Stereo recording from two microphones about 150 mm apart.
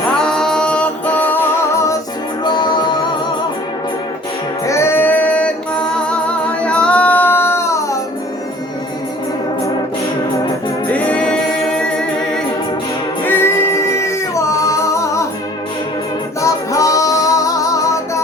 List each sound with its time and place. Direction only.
0.2 s music: 5° left (ahead or behind); by 3.1 s 30° left (ahead or behind)
4.6 s female singing: 20° left (ahead or behind)
10.9 s music: 10° left (ahead or behind)
13.2 s singing: 15° left (ahead or behind)
16.4 s music: 20° left (ahead or behind)